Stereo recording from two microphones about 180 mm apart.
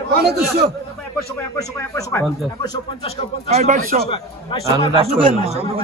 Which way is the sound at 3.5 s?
40° right (ahead or behind).